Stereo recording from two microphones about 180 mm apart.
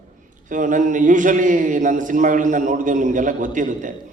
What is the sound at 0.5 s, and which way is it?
A man's voice, 45° right (ahead or behind).